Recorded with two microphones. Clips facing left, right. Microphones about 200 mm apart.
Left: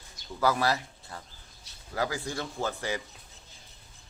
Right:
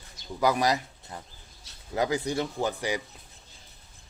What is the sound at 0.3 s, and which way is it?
A man's voice, 15° right (ahead or behind).